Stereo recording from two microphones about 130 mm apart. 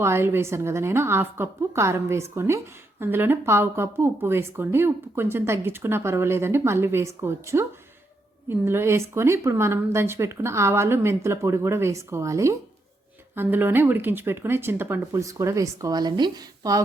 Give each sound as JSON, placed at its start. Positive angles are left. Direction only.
{"t": 0.0, "sound": "speech", "side_deg": -20}